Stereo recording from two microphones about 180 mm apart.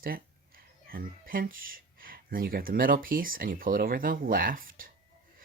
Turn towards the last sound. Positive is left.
turn(degrees=-50)  # may be behind; listen again after turning